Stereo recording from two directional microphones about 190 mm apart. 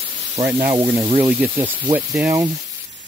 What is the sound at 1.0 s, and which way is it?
Speech, 25° right (ahead or behind).